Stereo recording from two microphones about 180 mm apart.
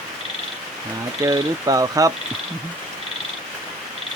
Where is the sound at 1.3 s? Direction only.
20° right (ahead or behind).